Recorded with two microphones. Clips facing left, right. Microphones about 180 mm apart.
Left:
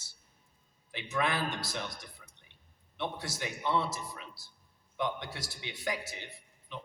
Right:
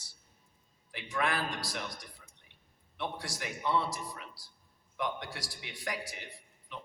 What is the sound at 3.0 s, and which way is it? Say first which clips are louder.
Speech: left 1 dB; 25° left (ahead or behind).